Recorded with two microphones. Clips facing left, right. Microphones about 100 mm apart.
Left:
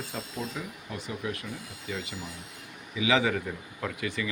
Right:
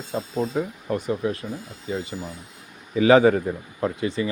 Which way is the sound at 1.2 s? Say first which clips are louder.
Right 8 dB; 30° right (ahead or behind).